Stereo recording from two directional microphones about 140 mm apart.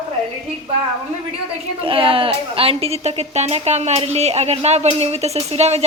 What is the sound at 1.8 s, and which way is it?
A woman's voice, 40° right (ahead or behind).